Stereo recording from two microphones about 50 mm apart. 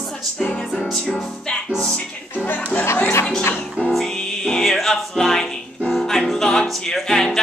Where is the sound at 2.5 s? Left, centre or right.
Left.